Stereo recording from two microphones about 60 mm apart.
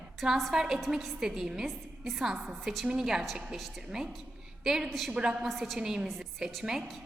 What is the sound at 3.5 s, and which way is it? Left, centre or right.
Speech, centre.